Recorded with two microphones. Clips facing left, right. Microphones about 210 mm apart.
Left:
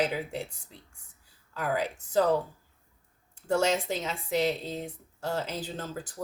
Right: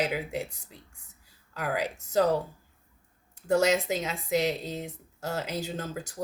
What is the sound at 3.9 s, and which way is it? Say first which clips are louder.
Speech: right 3 dB; 10° right (ahead or behind).